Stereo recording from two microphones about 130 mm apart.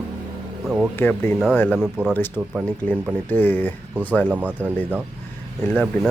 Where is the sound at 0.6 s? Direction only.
5° right (ahead or behind).